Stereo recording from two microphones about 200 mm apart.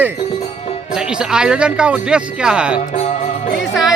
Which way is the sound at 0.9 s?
5° right (ahead or behind).